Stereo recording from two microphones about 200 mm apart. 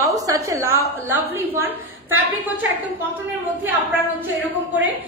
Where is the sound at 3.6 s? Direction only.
10° right (ahead or behind).